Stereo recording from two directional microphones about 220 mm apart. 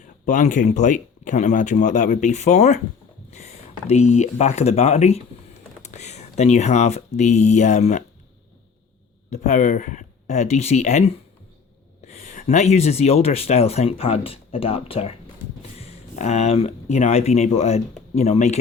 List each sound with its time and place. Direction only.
0.3 s speech: 35° left (ahead or behind)
9.3 s speech: 30° left (ahead or behind)